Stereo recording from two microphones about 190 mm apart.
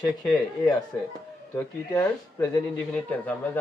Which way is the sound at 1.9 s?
15° left (ahead or behind).